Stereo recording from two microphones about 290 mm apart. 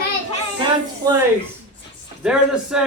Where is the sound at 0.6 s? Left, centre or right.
Centre.